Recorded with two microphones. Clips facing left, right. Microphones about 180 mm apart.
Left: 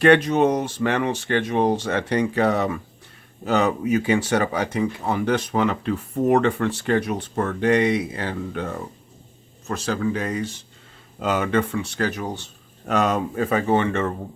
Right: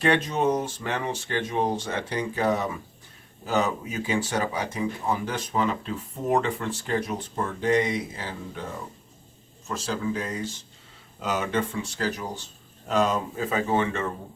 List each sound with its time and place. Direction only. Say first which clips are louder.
0.0 s speech: left 7 dB; 70° left (ahead or behind)
11.2 s speech: left 5 dB; 60° left (ahead or behind)